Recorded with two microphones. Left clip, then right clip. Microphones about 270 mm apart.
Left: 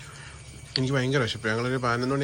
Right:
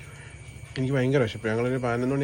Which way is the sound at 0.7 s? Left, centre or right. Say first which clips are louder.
Right 1 dB; centre.